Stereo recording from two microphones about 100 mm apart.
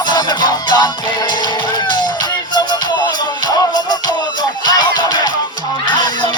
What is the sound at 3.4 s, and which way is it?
Music, 45° left (ahead or behind).